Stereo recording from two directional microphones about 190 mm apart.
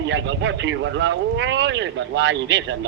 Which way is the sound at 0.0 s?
75° right (ahead or behind).